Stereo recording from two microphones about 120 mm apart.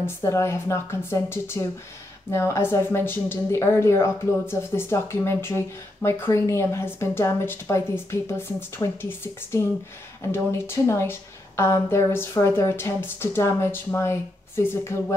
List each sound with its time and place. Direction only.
0.0 s a woman's voice: 25° left (ahead or behind)